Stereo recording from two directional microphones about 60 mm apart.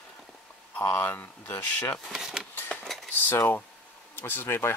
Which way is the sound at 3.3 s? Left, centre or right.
Left.